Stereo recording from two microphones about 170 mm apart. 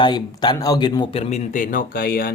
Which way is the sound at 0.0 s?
25° left (ahead or behind).